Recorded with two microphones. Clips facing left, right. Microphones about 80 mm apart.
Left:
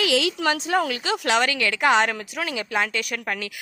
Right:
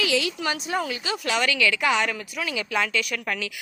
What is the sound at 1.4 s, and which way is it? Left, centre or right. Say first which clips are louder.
Speech: left 1 dB; left.